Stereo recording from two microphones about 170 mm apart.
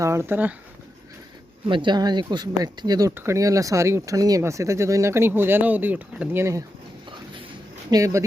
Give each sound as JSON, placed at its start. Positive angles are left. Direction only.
{"t": 0.0, "sound": "speech", "side_deg": -15}
{"t": 1.6, "sound": "speech", "side_deg": -30}
{"t": 7.9, "sound": "speech", "side_deg": -20}